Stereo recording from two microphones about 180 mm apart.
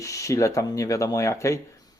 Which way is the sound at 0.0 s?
15° left (ahead or behind).